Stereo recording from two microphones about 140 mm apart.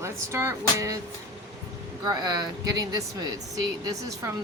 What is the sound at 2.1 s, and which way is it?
Speech, 30° right (ahead or behind).